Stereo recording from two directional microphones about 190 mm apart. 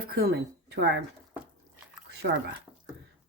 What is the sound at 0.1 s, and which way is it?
Speech, 55° right (ahead or behind).